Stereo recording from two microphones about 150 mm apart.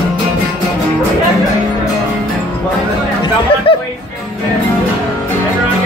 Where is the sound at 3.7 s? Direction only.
35° left (ahead or behind).